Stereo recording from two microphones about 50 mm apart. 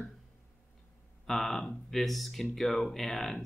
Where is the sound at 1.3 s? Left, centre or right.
Centre.